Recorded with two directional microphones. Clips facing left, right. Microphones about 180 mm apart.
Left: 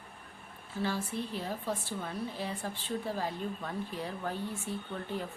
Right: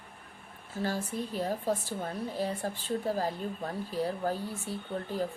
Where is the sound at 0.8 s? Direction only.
45° right (ahead or behind).